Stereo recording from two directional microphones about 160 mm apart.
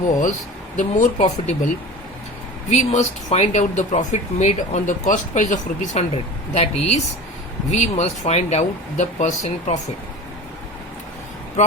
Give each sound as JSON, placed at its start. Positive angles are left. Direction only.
{"t": 0.8, "sound": "speech", "side_deg": 50}